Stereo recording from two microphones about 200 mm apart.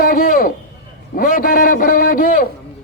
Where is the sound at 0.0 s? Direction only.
45° left (ahead or behind).